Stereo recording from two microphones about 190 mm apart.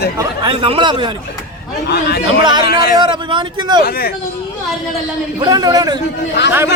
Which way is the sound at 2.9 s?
25° right (ahead or behind).